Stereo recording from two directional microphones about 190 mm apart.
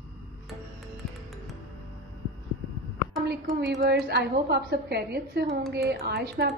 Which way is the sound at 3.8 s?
60° right (ahead or behind).